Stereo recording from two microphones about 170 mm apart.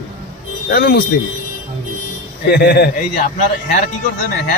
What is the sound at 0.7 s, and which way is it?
Speech, 65° left (ahead or behind).